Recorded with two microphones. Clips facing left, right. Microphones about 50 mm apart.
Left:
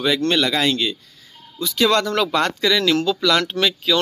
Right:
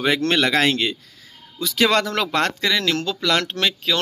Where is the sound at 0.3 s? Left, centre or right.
Right.